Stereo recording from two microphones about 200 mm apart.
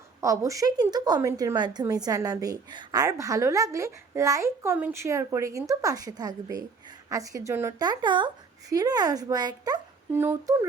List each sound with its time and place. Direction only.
0.2 s a woman's voice: 15° right (ahead or behind)